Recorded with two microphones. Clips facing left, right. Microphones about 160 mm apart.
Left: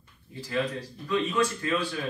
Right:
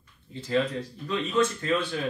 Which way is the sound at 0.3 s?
25° right (ahead or behind).